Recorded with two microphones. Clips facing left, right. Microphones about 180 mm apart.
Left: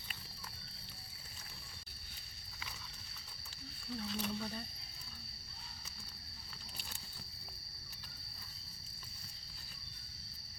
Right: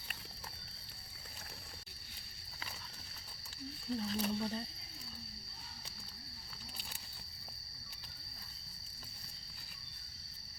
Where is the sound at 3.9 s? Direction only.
35° right (ahead or behind).